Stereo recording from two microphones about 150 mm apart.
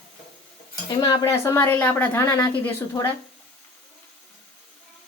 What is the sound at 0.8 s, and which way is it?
Speech, 25° left (ahead or behind).